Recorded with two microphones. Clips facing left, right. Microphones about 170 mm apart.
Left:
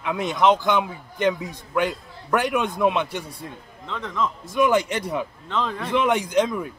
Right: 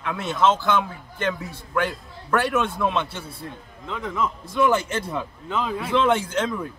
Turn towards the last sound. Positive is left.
turn(degrees=15)  # may be behind; listen again after turning